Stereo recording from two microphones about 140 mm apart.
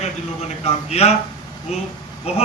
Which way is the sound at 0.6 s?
50° left (ahead or behind).